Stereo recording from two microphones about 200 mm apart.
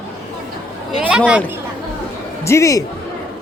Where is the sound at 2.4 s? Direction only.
15° left (ahead or behind).